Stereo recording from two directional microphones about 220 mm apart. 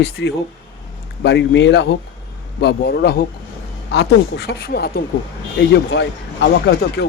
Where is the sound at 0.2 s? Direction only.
50° left (ahead or behind).